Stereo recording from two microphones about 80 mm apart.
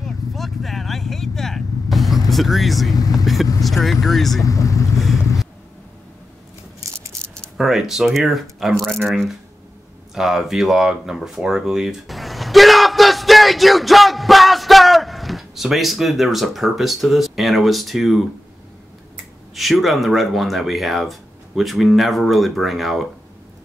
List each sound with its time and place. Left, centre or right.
0.0 s vehicle: centre
3.6 s speech: centre
4.5 s speech: left
7.1 s a sound: right
7.5 s speech: centre
10.1 s speech: centre
19.5 s speech: centre